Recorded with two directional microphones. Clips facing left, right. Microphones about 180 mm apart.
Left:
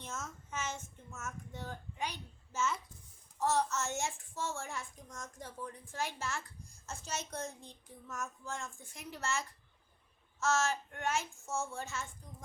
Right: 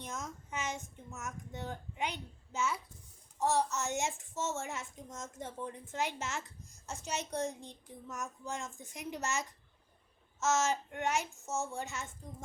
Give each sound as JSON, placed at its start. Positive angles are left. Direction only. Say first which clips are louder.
{"t": 0.0, "sound": "child singing", "louder": "right 2 dB", "side_deg": -15}
{"t": 3.3, "sound": "a child's voice", "louder": "right 1 dB", "side_deg": -15}